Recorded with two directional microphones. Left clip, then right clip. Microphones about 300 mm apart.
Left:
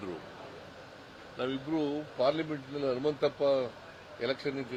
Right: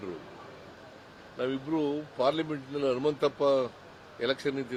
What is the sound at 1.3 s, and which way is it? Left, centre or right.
Speech, centre.